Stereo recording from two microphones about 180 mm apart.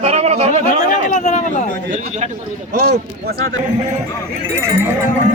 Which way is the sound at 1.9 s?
40° right (ahead or behind).